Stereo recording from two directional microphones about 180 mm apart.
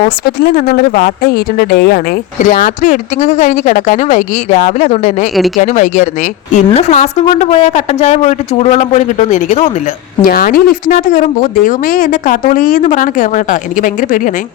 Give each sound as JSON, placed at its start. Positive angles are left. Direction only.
{"t": 0.3, "sound": "speech", "side_deg": 60}
{"t": 2.5, "sound": "a woman's voice", "side_deg": 45}
{"t": 10.2, "sound": "speech", "side_deg": 55}